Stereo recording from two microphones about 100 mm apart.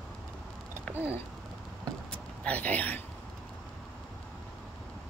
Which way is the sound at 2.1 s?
15° left (ahead or behind).